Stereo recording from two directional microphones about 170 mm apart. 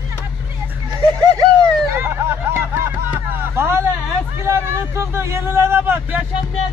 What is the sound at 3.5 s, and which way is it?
Speech, 15° right (ahead or behind).